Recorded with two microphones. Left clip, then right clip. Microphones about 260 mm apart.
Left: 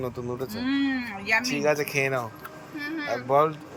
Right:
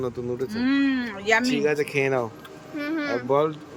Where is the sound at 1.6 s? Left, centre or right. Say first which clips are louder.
Right 1 dB; centre.